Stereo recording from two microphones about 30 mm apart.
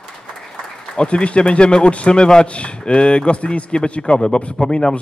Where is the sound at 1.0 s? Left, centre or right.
Left.